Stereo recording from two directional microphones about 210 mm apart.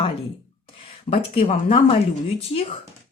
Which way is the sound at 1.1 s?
30° left (ahead or behind).